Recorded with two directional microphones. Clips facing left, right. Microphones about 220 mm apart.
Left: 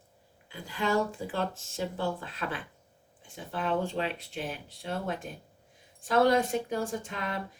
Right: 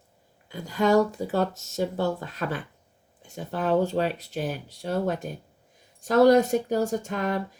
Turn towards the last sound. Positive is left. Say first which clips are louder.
# right 8 dB
turn(degrees=-45)  # may be behind; listen again after turning